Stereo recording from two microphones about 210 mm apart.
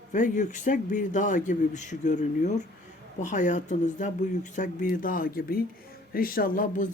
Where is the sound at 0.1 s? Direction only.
35° left (ahead or behind).